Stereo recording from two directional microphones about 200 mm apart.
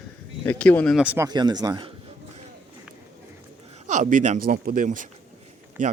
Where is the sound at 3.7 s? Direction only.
35° right (ahead or behind).